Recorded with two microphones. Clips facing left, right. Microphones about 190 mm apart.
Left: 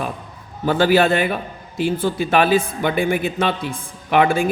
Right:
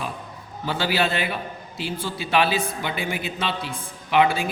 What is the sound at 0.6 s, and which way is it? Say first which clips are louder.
A man's voice: left 9 dB; 50° left (ahead or behind).